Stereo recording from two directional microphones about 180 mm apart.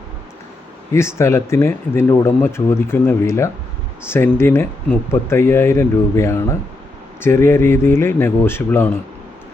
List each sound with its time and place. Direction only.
0.9 s speech: 15° left (ahead or behind)